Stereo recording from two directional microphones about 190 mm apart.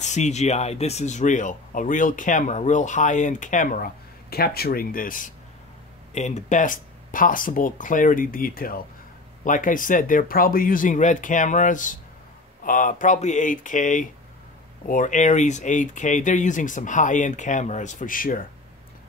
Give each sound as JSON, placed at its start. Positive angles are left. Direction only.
{"t": 0.0, "sound": "speech", "side_deg": 40}